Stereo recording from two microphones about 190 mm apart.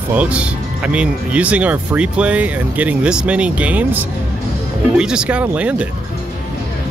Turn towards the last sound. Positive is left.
turn(degrees=-5)  # may be behind; listen again after turning